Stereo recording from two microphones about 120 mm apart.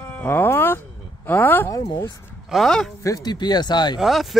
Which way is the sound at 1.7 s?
35° left (ahead or behind).